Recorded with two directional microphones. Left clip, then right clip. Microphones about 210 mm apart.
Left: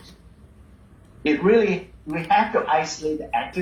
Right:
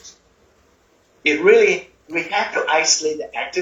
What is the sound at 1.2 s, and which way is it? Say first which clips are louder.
A man's voice: right 5 dB; 45° right (ahead or behind).